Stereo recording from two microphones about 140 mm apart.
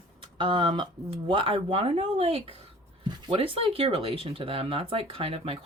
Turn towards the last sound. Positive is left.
turn(degrees=-45)  # may be behind; listen again after turning